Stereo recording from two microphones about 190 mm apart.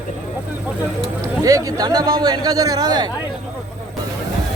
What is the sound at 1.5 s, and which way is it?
Speech, 20° right (ahead or behind).